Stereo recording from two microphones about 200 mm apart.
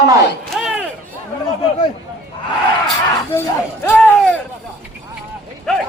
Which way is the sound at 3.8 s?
10° left (ahead or behind).